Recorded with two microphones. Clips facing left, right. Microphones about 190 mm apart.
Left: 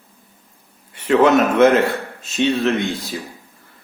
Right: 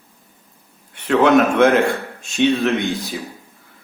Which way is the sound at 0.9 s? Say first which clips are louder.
Even; 10° left (ahead or behind).